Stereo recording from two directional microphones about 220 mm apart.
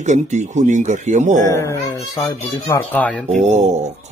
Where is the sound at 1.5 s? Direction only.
15° left (ahead or behind).